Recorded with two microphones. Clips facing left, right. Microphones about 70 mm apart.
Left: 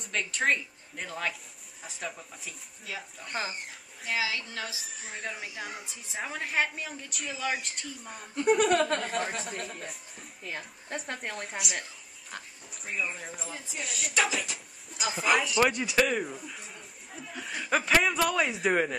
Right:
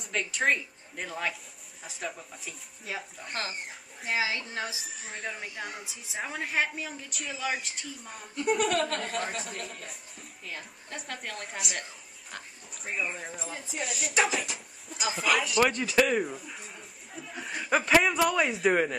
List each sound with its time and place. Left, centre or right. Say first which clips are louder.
0.0 s a woman's voice: right 1 dB; centre
4.2 s a woman's voice: right 2 dB; right
4.8 s a woman's voice: right 1 dB; centre
8.7 s speech: left 3 dB; left
9.3 s a woman's voice: left 1 dB; centre